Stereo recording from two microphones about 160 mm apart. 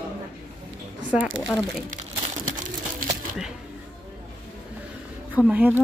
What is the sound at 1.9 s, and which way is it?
Crumpling, 55° right (ahead or behind).